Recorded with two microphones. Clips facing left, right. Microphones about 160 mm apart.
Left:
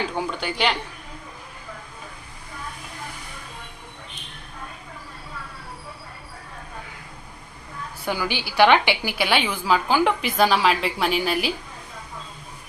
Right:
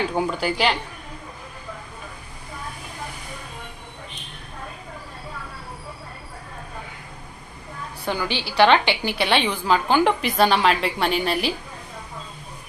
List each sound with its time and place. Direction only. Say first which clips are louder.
0.2 s a woman's voice: right 4 dB; 5° right (ahead or behind)
8.0 s a woman's voice: right 1 dB; 10° left (ahead or behind)